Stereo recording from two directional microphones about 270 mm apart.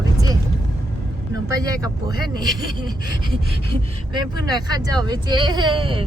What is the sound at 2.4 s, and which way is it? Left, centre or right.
Speech, centre.